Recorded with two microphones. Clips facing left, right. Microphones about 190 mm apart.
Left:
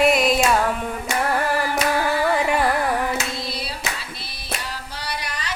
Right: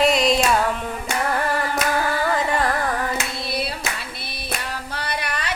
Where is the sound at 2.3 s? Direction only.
10° left (ahead or behind).